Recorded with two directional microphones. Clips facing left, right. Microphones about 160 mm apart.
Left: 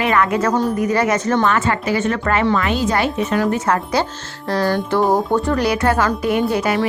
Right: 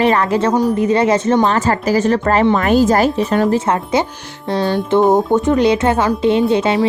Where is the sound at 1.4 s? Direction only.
35° right (ahead or behind).